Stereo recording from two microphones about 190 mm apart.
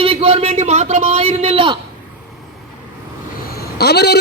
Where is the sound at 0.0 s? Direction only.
30° right (ahead or behind).